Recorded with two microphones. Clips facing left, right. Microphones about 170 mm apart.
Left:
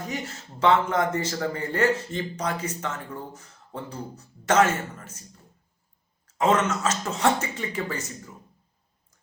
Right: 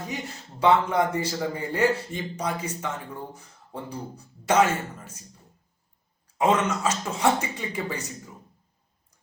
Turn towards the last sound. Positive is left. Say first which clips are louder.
# left 1 dB
turn(degrees=-15)  # may be behind; listen again after turning